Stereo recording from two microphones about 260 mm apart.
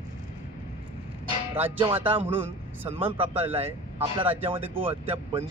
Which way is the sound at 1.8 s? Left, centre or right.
Centre.